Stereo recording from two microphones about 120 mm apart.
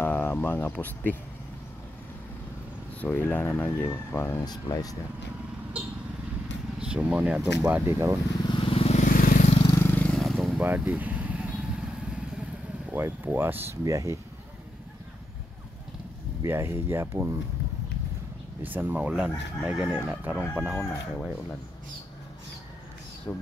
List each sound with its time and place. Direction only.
0.0 s speech: 15° left (ahead or behind)
3.0 s speech: 15° left (ahead or behind)
4.5 s speech: 35° left (ahead or behind)
5.7 s speech: 10° right (ahead or behind)
8.5 s vehicle: 50° left (ahead or behind); by 9.6 s 90° left
9.8 s vehicle: 15° left (ahead or behind)
10.1 s vehicle: centre (ahead or behind)
10.6 s vehicle: 10° right (ahead or behind)
12.9 s speech: 20° right (ahead or behind)
16.4 s speech: 20° right (ahead or behind)
18.6 s speech: 15° right (ahead or behind)
20.7 s speech: 5° left (ahead or behind)
23.3 s speech: 15° left (ahead or behind)